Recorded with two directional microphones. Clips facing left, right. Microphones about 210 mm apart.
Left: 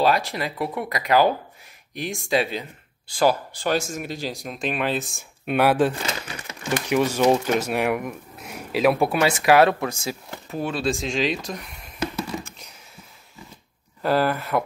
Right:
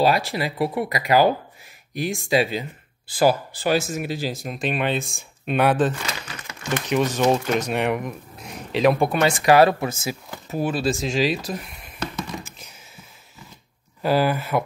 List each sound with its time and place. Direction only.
0.0 s speech: 10° right (ahead or behind); by 5.9 s 10° left (ahead or behind)
5.9 s crumpling: 25° left (ahead or behind)
6.6 s speech: 10° left (ahead or behind)
12.0 s a sound: 10° left (ahead or behind)
14.0 s speech: 5° right (ahead or behind)